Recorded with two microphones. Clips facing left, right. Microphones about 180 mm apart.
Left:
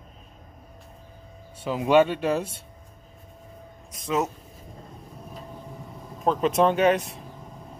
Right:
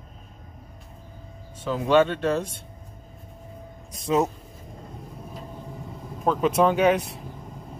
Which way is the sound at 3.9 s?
30° right (ahead or behind).